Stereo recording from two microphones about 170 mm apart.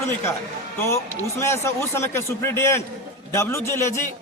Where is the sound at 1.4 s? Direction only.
15° left (ahead or behind).